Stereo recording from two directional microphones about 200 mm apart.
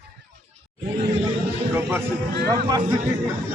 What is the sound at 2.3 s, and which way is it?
Speech, 50° right (ahead or behind).